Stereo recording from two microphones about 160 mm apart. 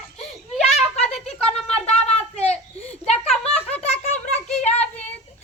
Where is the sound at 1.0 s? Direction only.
5° left (ahead or behind).